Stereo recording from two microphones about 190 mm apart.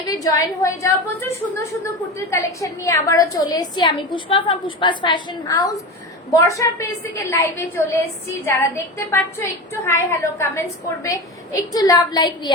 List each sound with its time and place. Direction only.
0.1 s a woman's voice: 20° left (ahead or behind)